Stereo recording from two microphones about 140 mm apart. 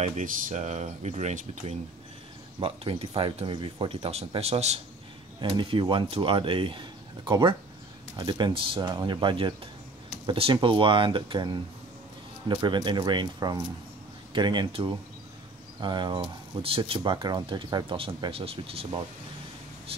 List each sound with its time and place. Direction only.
0.0 s speech: 60° right (ahead or behind)
2.6 s speech: 40° right (ahead or behind)
5.4 s speech: 35° right (ahead or behind)